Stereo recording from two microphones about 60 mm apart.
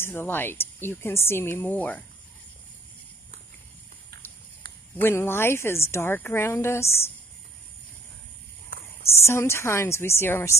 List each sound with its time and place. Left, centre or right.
0.0 s speech: left
5.0 s speech: left
8.8 s speech: left